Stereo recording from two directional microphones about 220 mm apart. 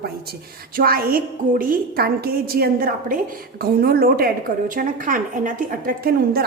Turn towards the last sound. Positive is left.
turn(degrees=-40)  # may be behind; listen again after turning